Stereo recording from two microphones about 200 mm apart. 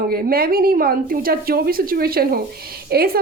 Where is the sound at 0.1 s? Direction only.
50° right (ahead or behind).